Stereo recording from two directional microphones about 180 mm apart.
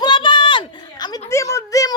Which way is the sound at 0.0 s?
25° left (ahead or behind).